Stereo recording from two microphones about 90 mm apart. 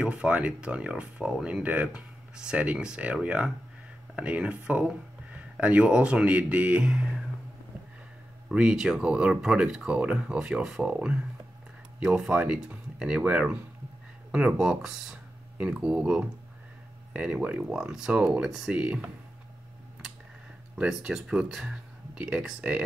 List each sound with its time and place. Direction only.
0.0 s speech: 15° right (ahead or behind)
8.5 s speech: 10° right (ahead or behind)
17.7 s speech: 5° right (ahead or behind)
20.7 s speech: 10° right (ahead or behind)